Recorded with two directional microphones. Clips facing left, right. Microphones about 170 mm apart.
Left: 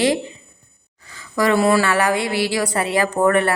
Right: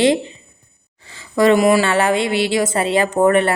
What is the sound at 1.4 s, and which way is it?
A woman's voice, 20° right (ahead or behind).